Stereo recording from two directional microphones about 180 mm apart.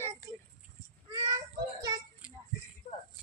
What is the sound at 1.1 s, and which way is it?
Child singing, 20° right (ahead or behind).